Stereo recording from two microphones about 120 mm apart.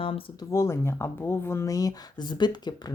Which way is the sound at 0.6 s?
20° left (ahead or behind).